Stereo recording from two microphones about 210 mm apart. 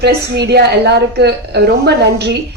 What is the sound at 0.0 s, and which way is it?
A woman's voice, 50° right (ahead or behind).